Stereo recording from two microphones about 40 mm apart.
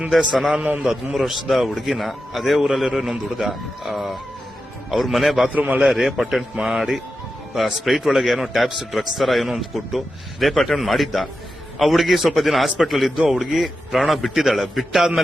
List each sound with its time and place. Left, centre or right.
0.3 s a man's voice: centre
5.5 s a man's voice: right
5.8 s a man's voice: centre